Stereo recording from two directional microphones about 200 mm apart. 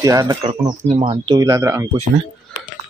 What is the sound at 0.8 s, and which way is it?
Speech, 35° right (ahead or behind).